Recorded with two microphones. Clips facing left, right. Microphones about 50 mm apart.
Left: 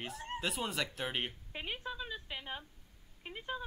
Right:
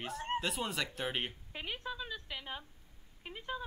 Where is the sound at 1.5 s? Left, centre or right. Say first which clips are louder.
Even; centre.